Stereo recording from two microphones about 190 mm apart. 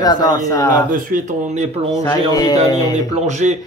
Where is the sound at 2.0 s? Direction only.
20° left (ahead or behind).